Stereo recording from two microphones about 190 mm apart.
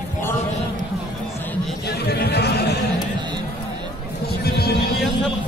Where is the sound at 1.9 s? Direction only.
60° left (ahead or behind).